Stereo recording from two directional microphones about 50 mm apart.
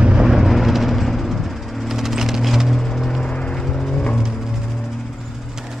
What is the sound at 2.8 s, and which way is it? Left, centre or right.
Music, centre.